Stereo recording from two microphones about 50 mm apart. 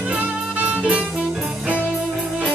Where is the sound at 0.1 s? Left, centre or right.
Right.